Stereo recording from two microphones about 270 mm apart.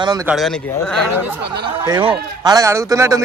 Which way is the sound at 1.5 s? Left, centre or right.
Centre.